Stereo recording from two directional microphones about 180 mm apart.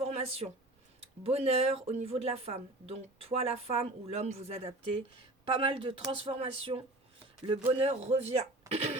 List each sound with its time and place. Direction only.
0.0 s a sound: 35° right (ahead or behind)
1.2 s a woman's voice: 35° right (ahead or behind)
8.7 s cough: 35° right (ahead or behind)